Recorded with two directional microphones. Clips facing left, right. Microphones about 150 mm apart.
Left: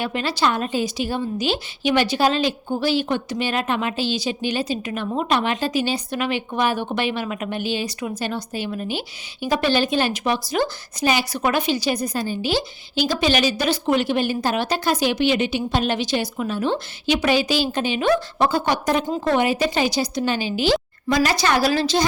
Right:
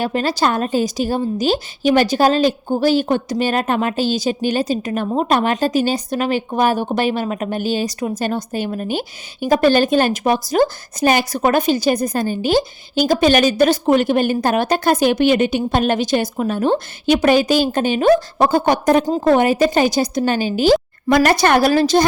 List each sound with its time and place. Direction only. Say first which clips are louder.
0.0 s a woman's voice: right 4 dB; 40° right (ahead or behind)